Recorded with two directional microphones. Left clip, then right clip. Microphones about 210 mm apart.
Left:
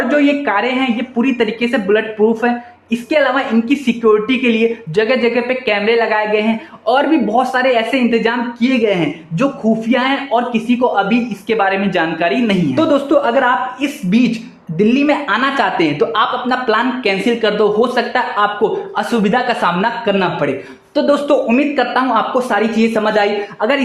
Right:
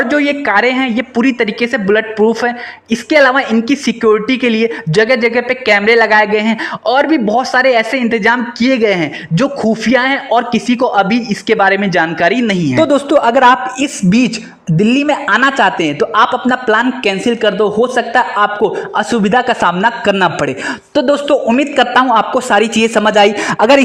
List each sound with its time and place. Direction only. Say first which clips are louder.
0.1 s a woman's voice: right 2 dB; 35° right (ahead or behind)